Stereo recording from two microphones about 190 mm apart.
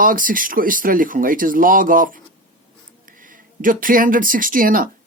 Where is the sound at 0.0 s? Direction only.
45° right (ahead or behind).